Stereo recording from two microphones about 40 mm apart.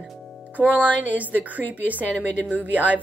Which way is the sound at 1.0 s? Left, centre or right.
Right.